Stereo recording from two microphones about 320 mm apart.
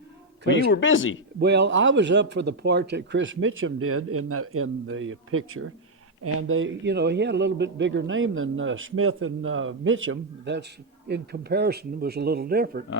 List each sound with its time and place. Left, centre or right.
0.7 s speech: left
1.4 s a man's voice: right